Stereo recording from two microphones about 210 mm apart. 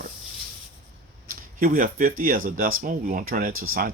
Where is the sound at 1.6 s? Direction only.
40° right (ahead or behind).